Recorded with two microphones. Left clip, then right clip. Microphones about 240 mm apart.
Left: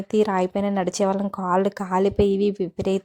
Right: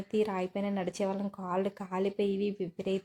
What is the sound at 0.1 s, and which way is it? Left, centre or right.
Speech, left.